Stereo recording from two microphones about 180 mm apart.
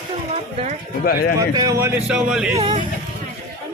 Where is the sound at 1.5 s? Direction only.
20° right (ahead or behind); by 2.5 s 5° right (ahead or behind).